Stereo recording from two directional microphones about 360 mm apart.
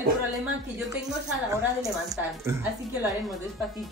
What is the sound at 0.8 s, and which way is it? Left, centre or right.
A woman's voice, centre.